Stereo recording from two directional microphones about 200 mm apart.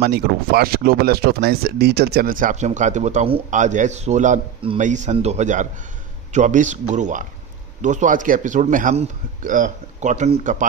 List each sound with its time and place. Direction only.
0.0 s speech: 50° right (ahead or behind)